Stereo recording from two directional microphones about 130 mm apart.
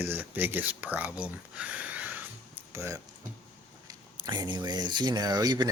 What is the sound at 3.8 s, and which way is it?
Speech, 35° right (ahead or behind).